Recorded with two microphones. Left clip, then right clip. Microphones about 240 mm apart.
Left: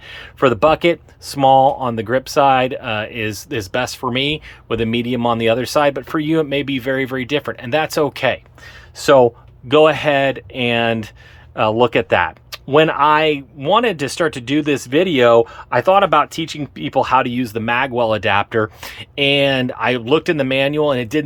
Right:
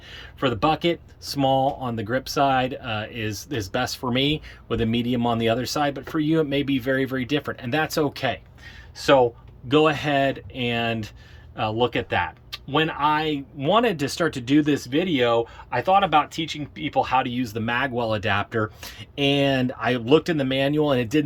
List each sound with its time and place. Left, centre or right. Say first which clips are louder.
0.1 s speech: left 10 dB; centre
9.6 s speech: left 8 dB; centre